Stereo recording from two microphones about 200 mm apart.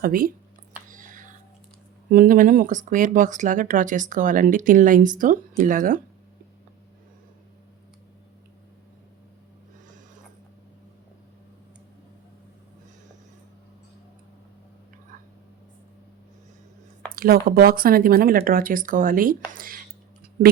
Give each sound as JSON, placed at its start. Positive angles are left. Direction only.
{"t": 0.0, "sound": "speech", "side_deg": -45}
{"t": 0.9, "sound": "a sound", "side_deg": -40}
{"t": 2.0, "sound": "speech", "side_deg": -45}
{"t": 17.2, "sound": "speech", "side_deg": -50}